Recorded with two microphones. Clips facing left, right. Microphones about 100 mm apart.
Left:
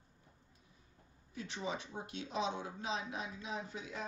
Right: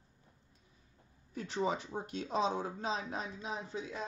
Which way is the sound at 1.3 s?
45° right (ahead or behind).